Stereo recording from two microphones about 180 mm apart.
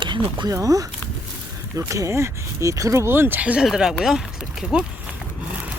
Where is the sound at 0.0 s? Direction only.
25° right (ahead or behind); by 4.9 s 5° right (ahead or behind).